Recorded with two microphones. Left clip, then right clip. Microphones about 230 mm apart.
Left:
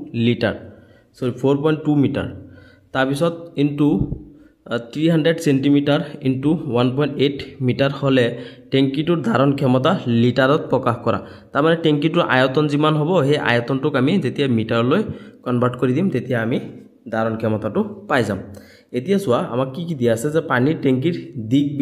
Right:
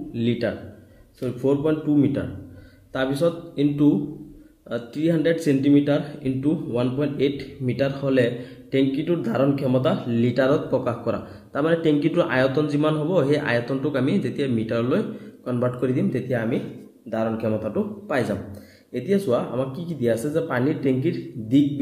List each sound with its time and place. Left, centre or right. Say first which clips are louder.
0.1 s a man's voice: left 5 dB; left